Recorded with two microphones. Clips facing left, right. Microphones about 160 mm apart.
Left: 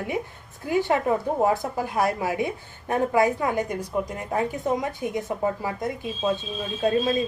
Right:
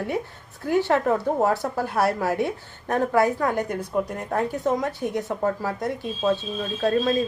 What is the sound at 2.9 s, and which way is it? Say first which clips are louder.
Speech: right 1 dB; 15° left (ahead or behind).